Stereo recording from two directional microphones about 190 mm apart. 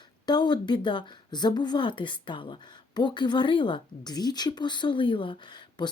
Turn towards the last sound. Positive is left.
turn(degrees=25)  # may be behind; listen again after turning